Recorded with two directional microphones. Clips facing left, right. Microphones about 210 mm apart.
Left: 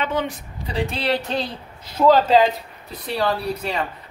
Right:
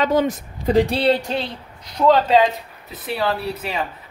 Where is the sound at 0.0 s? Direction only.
40° right (ahead or behind).